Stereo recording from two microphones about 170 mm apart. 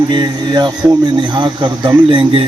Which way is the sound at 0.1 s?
25° right (ahead or behind).